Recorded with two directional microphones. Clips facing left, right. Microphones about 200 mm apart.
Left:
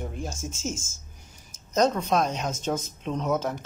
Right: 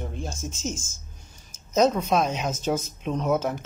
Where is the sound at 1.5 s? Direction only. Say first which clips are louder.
Right 2 dB; 5° right (ahead or behind).